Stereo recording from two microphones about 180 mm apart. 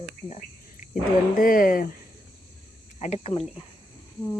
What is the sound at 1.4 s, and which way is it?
Speech, 50° left (ahead or behind).